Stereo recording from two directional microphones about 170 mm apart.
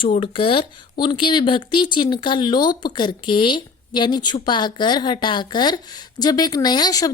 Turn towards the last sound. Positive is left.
turn(degrees=20)  # may be behind; listen again after turning